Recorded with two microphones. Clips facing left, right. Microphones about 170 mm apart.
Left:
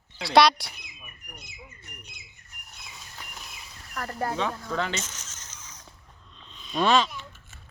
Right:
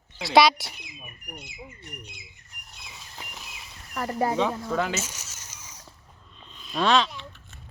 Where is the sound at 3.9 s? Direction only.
15° right (ahead or behind).